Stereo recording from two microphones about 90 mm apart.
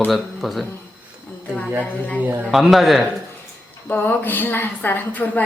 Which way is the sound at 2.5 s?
Centre (ahead or behind).